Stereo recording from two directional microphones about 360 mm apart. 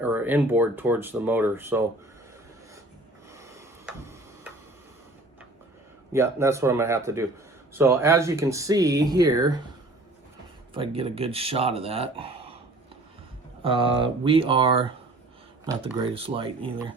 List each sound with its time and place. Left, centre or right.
0.0 s speech: centre
3.3 s rub: centre
6.1 s speech: centre
10.8 s speech: centre
13.6 s speech: centre